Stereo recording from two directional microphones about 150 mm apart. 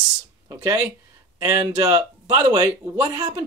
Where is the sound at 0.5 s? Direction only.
20° right (ahead or behind).